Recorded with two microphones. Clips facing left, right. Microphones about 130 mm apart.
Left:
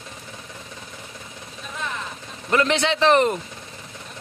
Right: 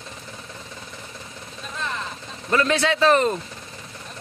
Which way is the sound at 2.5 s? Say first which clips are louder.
Even; 20° left (ahead or behind).